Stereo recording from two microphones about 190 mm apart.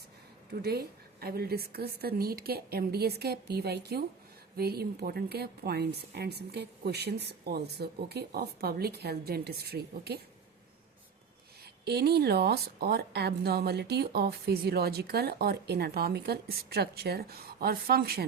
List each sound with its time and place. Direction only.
0.5 s a woman's voice: 55° right (ahead or behind)
11.6 s a woman's voice: 60° right (ahead or behind)